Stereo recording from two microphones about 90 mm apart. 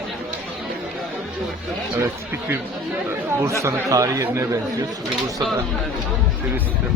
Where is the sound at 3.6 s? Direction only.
35° right (ahead or behind).